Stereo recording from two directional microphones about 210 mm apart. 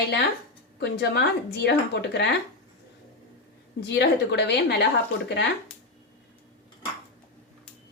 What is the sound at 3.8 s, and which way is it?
A woman's voice, 55° left (ahead or behind).